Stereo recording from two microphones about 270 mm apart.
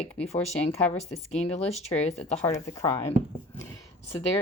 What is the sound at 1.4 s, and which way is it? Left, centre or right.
Speech, left.